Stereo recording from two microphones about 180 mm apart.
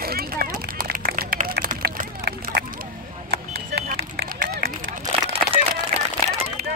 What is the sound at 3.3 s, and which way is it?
Vehicle, 65° right (ahead or behind).